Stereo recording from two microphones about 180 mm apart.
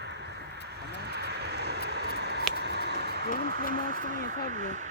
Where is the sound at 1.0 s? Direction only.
65° right (ahead or behind).